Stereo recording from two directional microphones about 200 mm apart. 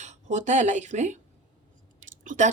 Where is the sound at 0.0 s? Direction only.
35° right (ahead or behind).